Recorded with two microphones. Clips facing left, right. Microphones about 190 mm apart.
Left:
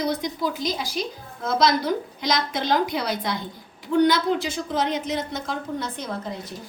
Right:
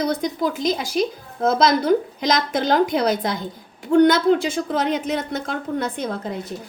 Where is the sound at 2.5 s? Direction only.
50° right (ahead or behind).